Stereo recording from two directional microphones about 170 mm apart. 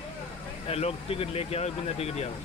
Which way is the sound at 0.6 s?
35° left (ahead or behind).